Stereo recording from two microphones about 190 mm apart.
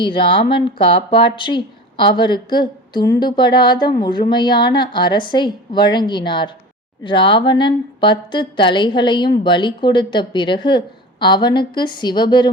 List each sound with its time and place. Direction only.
0.0 s speech: 25° left (ahead or behind)